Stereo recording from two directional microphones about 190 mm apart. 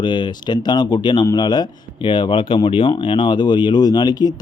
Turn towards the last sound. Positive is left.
turn(degrees=20)  # may be behind; listen again after turning